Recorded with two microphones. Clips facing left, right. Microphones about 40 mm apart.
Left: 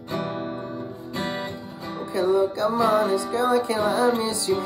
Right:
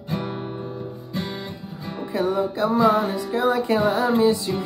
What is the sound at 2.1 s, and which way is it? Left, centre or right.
Music, right.